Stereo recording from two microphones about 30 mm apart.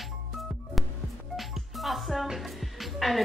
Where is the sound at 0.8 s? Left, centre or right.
Centre.